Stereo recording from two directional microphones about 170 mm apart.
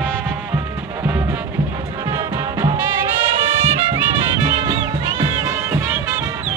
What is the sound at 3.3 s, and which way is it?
Music, 40° right (ahead or behind).